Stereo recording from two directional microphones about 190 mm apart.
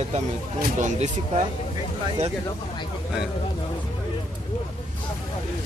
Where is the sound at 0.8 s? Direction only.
40° right (ahead or behind).